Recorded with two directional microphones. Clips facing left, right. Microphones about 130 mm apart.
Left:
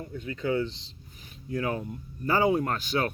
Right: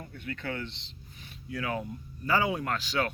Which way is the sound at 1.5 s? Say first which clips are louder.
Left 3 dB; 35° left (ahead or behind).